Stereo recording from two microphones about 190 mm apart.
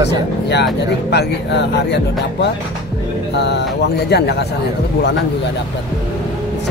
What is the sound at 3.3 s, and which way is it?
Speech, 65° left (ahead or behind).